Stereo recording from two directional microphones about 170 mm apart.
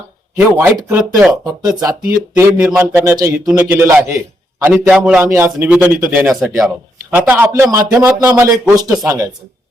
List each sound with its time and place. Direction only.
0.3 s speech: 15° right (ahead or behind)